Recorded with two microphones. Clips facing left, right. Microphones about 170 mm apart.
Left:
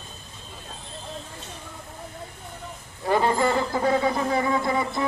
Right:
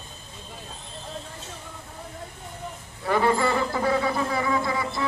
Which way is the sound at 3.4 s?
20° left (ahead or behind).